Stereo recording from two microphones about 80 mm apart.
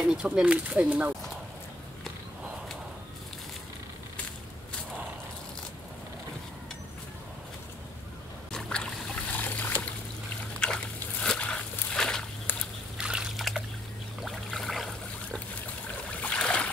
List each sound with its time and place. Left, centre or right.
0.0 s speech: centre
8.5 s a sound: centre
9.3 s trickle: centre
10.6 s a sound: centre
11.2 s dog: centre
12.9 s trickle: centre
14.2 s boat: centre
16.1 s boat: centre